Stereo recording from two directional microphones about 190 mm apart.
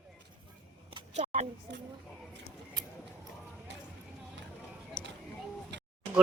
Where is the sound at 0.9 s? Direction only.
35° right (ahead or behind).